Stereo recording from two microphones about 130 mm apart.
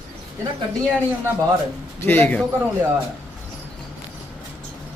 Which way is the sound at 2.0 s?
15° left (ahead or behind).